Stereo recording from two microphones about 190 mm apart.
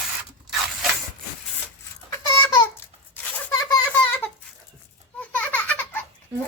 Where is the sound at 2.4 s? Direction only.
20° left (ahead or behind).